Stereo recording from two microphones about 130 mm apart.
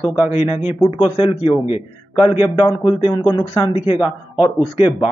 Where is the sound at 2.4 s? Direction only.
30° left (ahead or behind).